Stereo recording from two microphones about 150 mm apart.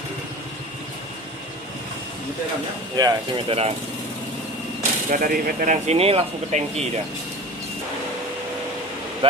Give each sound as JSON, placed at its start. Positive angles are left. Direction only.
{"t": 2.9, "sound": "speech", "side_deg": -25}
{"t": 3.5, "sound": "speech", "side_deg": -45}
{"t": 5.0, "sound": "speech", "side_deg": -65}